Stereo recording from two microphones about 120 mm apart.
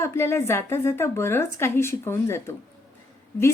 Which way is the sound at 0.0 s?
20° left (ahead or behind).